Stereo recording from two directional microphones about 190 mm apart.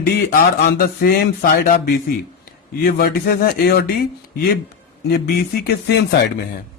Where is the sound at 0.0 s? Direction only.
55° left (ahead or behind).